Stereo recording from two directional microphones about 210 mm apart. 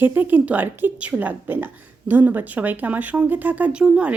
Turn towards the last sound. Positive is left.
turn(degrees=-5)  # may be behind; listen again after turning